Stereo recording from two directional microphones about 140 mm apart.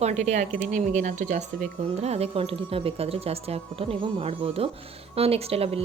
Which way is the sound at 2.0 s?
50° right (ahead or behind).